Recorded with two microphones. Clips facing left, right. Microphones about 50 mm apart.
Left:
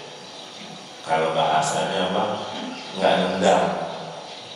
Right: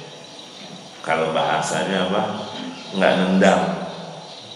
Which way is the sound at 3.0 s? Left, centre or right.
Right.